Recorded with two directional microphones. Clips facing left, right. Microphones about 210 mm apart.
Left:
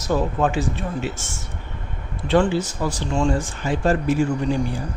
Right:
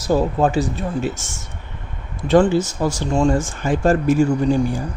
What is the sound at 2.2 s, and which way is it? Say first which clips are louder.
Speech: right 4 dB; 45° right (ahead or behind).